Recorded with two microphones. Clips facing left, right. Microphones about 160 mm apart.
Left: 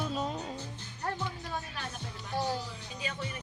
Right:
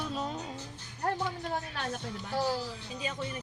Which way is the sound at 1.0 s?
55° right (ahead or behind).